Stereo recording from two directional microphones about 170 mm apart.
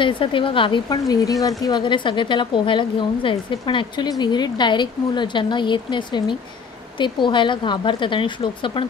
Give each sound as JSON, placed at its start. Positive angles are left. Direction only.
{"t": 0.0, "sound": "a woman's voice", "side_deg": 30}